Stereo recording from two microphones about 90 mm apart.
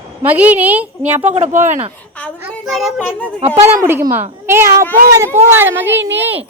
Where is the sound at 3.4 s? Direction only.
90° right.